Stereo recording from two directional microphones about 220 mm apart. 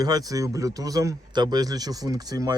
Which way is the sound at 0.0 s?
15° right (ahead or behind).